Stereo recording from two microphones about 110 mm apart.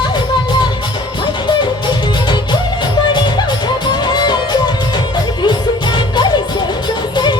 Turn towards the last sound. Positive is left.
turn(degrees=40)  # may be behind; listen again after turning